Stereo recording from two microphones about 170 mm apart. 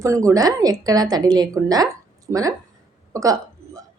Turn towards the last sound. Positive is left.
turn(degrees=-20)  # may be behind; listen again after turning